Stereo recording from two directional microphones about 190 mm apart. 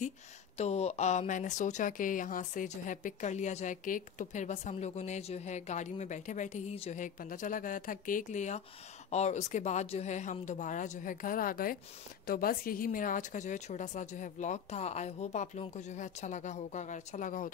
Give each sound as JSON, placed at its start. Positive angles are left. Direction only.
{"t": 0.6, "sound": "speech", "side_deg": 35}